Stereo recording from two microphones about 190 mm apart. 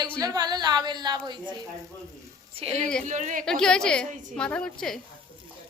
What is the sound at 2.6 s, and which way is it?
Speech, 30° right (ahead or behind).